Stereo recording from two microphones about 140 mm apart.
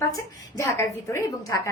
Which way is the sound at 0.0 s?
25° left (ahead or behind).